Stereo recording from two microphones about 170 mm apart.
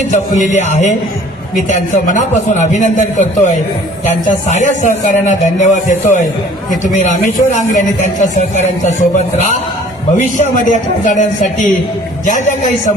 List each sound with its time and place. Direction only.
0.3 s a man's voice: 45° left (ahead or behind)
10.2 s a man's voice: 45° left (ahead or behind)